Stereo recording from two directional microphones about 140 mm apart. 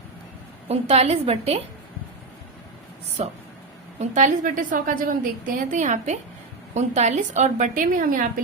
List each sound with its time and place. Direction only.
0.7 s a woman's voice: 45° right (ahead or behind)
3.2 s a woman's voice: 55° right (ahead or behind)
4.1 s a woman's voice: 65° right (ahead or behind)